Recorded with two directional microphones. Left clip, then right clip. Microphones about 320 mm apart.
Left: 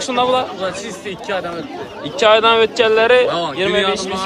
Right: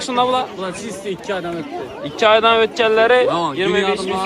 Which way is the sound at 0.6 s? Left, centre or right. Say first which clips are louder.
Left 3 dB; centre.